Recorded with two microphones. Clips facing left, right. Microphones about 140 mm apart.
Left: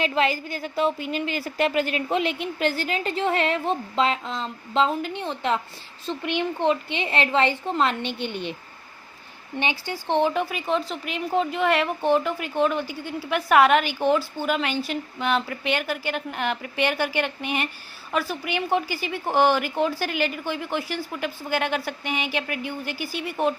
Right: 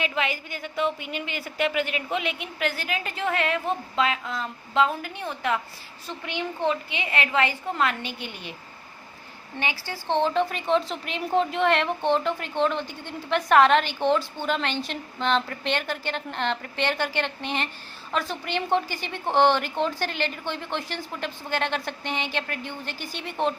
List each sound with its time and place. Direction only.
0.0 s a woman's voice: 35° left (ahead or behind)
9.6 s a woman's voice: 20° left (ahead or behind)